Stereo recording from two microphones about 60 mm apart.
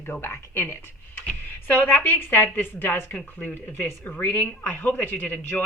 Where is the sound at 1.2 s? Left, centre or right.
Left.